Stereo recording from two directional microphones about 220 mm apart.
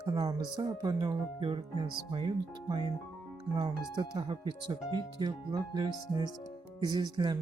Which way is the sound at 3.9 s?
20° right (ahead or behind).